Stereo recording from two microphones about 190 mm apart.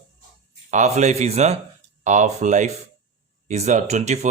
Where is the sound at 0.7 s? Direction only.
40° right (ahead or behind).